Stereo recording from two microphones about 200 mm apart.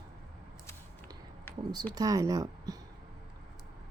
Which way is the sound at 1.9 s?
20° right (ahead or behind).